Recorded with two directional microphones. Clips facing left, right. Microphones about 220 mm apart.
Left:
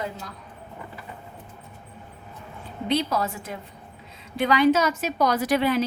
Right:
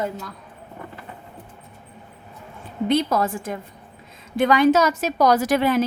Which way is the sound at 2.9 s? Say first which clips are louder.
Right 4 dB; 50° right (ahead or behind).